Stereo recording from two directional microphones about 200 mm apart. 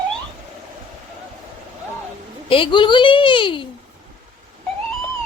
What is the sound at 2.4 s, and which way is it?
Speech, 25° left (ahead or behind).